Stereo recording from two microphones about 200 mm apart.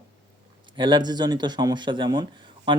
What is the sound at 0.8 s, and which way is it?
Speech, 20° right (ahead or behind).